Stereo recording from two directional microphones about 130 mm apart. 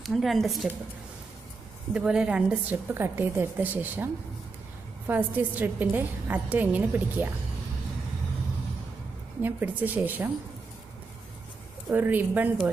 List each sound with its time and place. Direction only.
0.0 s a woman's voice: centre (ahead or behind)
2.0 s a woman's voice: 5° right (ahead or behind)
9.4 s a woman's voice: 15° right (ahead or behind)
11.9 s a woman's voice: 15° right (ahead or behind)